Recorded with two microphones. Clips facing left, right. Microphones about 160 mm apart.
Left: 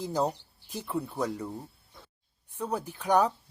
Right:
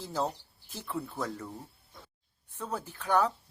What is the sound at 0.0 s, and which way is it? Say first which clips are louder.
Speech: left 4 dB; 15° left (ahead or behind).